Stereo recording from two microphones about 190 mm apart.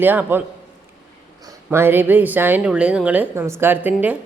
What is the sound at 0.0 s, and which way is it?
Speech, 10° right (ahead or behind).